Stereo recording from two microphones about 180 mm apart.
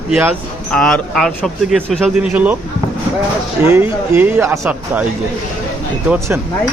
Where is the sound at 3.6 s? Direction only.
10° right (ahead or behind).